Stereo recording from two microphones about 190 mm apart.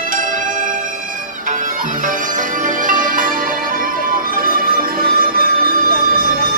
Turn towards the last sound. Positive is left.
turn(degrees=-50)  # may be behind; listen again after turning